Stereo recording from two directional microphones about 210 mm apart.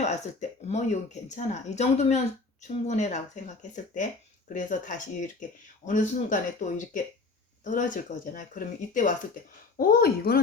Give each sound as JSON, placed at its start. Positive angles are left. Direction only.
{"t": 0.0, "sound": "speech", "side_deg": 35}